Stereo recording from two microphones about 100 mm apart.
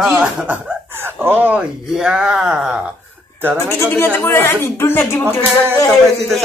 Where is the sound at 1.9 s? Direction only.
5° right (ahead or behind).